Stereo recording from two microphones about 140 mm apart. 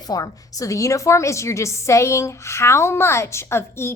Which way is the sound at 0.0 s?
25° left (ahead or behind).